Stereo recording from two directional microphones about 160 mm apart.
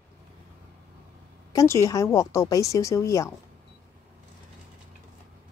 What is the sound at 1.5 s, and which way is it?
A woman's voice, 20° left (ahead or behind).